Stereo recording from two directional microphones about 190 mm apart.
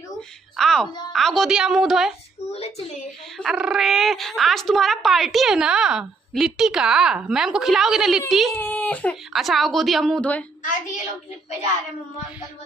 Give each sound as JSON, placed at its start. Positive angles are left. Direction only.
{"t": 0.6, "sound": "speech", "side_deg": 0}
{"t": 2.5, "sound": "a sound", "side_deg": 30}
{"t": 3.3, "sound": "speech", "side_deg": -5}